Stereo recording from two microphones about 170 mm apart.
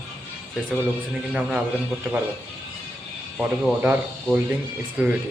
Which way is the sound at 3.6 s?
10° right (ahead or behind).